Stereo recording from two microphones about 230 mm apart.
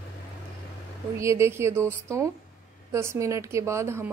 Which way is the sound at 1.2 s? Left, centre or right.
Centre.